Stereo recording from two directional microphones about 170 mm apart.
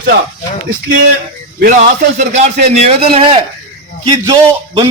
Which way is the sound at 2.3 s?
40° right (ahead or behind).